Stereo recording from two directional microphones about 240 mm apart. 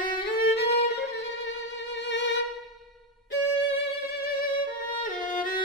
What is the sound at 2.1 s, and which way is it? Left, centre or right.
Violin, left.